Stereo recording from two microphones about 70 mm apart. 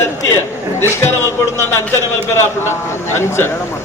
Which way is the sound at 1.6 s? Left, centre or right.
Left.